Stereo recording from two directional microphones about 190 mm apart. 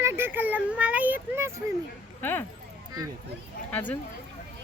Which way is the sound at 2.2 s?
10° left (ahead or behind).